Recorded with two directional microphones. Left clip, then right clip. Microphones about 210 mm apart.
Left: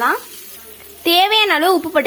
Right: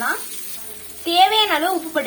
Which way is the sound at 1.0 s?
45° left (ahead or behind).